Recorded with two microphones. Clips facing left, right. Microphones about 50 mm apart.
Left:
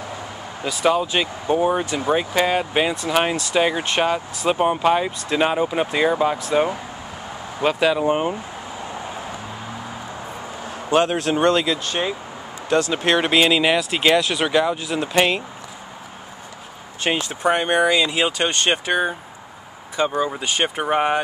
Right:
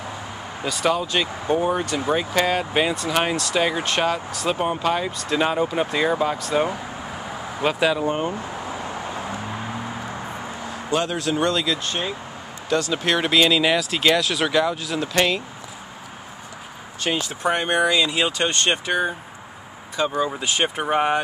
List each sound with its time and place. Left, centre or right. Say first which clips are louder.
0.7 s speech: left 3 dB; centre
8.0 s speech: left 3 dB; centre
10.9 s speech: left 5 dB; left
11.6 s speech: left 2 dB; centre
12.9 s speech: even; left
17.0 s speech: left 2 dB; left
17.4 s speech: left 3 dB; centre